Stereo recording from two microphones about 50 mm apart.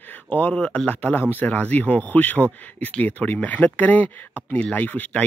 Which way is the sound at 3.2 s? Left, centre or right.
Left.